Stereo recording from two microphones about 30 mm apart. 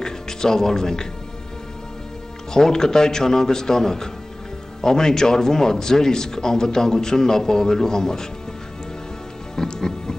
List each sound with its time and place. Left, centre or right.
0.0 s music: centre
2.5 s a man's voice: centre
9.6 s music: left